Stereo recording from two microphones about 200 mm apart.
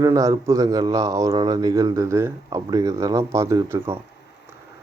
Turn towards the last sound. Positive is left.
turn(degrees=-15)  # may be behind; listen again after turning